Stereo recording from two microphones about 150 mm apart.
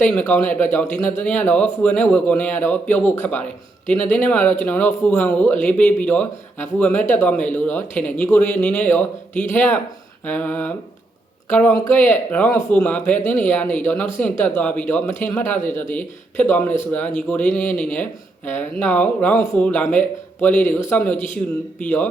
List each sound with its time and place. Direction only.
0.0 s speech: 10° left (ahead or behind)